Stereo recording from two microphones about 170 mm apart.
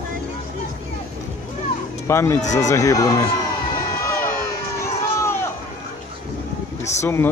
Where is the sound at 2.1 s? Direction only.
15° left (ahead or behind).